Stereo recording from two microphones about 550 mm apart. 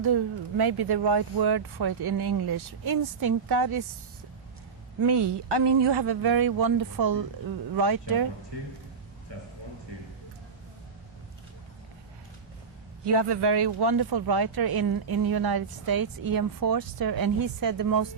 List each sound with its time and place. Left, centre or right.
0.0 s speech: right
5.0 s speech: right
13.1 s speech: right